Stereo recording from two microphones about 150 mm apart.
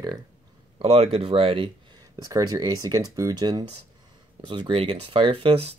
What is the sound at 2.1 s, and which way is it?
Speech, 25° right (ahead or behind).